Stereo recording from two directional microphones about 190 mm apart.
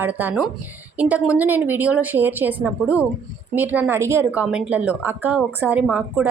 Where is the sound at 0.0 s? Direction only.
10° right (ahead or behind).